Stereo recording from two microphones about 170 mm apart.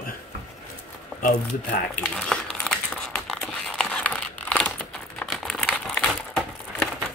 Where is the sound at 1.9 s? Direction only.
5° left (ahead or behind).